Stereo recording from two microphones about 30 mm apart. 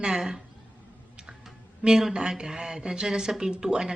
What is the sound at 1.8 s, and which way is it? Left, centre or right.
A woman's voice, right.